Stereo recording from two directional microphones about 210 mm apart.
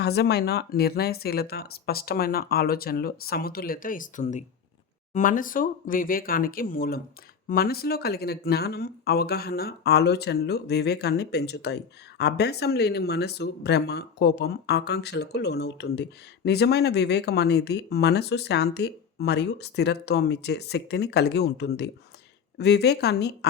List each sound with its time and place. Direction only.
0.0 s speech: 50° left (ahead or behind)